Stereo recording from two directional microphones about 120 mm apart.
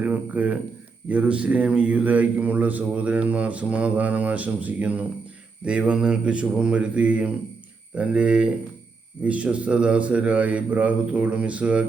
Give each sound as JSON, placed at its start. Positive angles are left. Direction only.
{"t": 0.0, "sound": "a man's voice", "side_deg": -15}